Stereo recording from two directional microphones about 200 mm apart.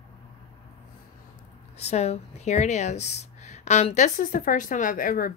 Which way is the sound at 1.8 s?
30° left (ahead or behind).